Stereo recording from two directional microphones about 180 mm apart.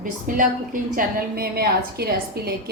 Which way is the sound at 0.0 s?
50° right (ahead or behind).